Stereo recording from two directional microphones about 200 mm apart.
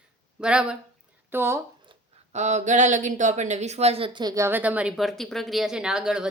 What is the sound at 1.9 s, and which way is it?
Speech, 35° right (ahead or behind).